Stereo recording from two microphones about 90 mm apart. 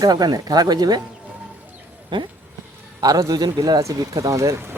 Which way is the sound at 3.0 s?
40° right (ahead or behind).